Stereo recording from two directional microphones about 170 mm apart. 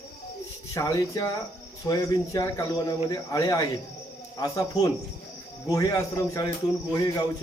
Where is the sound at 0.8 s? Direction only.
20° left (ahead or behind).